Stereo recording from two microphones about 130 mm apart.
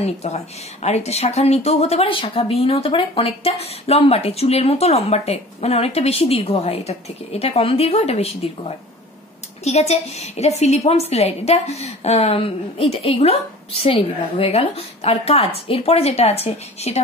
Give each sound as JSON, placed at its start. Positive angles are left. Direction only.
{"t": 0.0, "sound": "speech", "side_deg": 55}